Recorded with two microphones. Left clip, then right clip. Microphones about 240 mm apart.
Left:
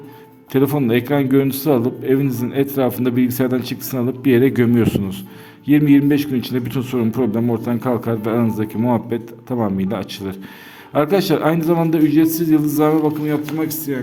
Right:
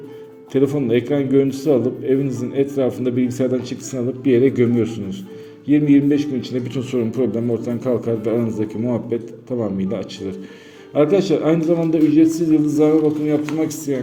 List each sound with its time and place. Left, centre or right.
0.5 s a man's voice: left